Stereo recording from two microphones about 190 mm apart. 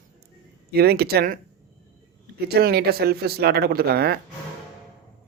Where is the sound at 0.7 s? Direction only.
55° right (ahead or behind).